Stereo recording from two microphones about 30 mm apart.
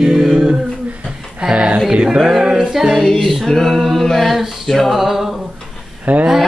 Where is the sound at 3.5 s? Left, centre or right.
Centre.